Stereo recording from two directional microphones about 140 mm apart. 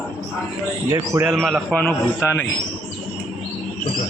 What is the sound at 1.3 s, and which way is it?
A man's voice, centre (ahead or behind).